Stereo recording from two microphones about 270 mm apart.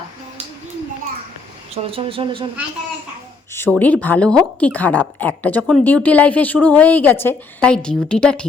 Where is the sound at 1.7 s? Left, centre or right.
Right.